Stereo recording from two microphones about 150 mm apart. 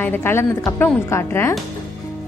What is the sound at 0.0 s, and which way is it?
A woman's voice, 15° left (ahead or behind).